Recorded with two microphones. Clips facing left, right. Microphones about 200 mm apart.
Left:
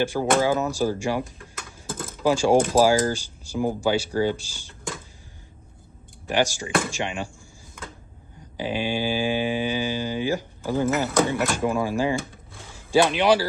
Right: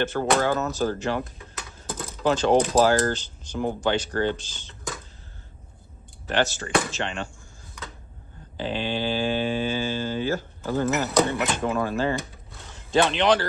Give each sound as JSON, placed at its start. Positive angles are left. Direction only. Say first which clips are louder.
{"t": 0.0, "sound": "speech", "louder": "left 1 dB", "side_deg": 10}
{"t": 1.6, "sound": "a sound", "louder": "left 1 dB", "side_deg": 50}
{"t": 2.2, "sound": "speech", "louder": "left 1 dB", "side_deg": 10}
{"t": 6.2, "sound": "speech", "louder": "left 1 dB", "side_deg": 10}
{"t": 8.5, "sound": "speech", "louder": "left 2 dB", "side_deg": 10}